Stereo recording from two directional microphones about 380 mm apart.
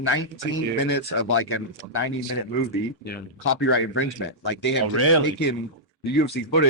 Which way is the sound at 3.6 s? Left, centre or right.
Left.